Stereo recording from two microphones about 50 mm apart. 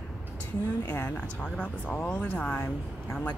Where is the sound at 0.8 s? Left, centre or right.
Left.